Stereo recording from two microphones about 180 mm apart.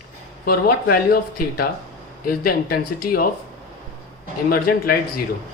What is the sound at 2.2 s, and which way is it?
Speech, 60° left (ahead or behind).